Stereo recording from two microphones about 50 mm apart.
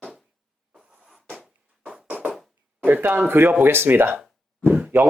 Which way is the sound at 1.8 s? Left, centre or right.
Right.